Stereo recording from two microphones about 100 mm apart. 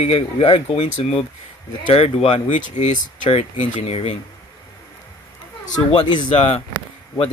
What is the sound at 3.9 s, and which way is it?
Speech, 80° left.